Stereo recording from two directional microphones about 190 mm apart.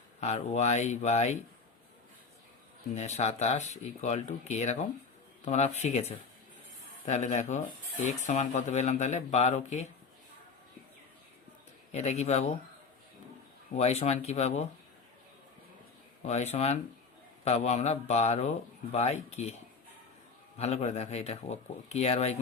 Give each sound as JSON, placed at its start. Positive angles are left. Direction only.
{"t": 0.2, "sound": "speech", "side_deg": 35}
{"t": 2.9, "sound": "speech", "side_deg": 35}
{"t": 11.9, "sound": "speech", "side_deg": 35}
{"t": 13.7, "sound": "speech", "side_deg": 35}
{"t": 16.2, "sound": "speech", "side_deg": 35}
{"t": 20.6, "sound": "speech", "side_deg": 35}